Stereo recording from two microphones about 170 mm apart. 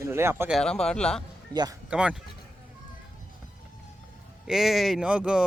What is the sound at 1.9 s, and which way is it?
Speech, 5° right (ahead or behind).